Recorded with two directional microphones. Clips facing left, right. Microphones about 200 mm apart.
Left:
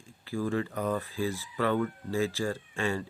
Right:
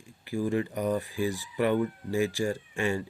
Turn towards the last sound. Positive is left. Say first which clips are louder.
# right 2 dB
turn(degrees=-15)  # may be behind; listen again after turning